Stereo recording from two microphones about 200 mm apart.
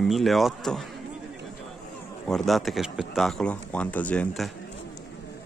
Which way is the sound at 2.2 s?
Centre (ahead or behind).